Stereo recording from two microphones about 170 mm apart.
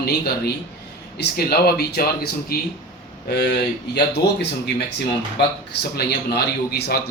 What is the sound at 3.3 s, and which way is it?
Speech, 70° left (ahead or behind).